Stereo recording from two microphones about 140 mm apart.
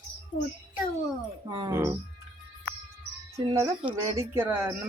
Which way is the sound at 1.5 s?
35° right (ahead or behind).